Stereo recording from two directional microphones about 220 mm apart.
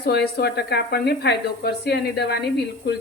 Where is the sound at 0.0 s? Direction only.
50° left (ahead or behind).